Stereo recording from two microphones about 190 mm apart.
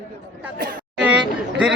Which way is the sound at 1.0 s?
5° right (ahead or behind).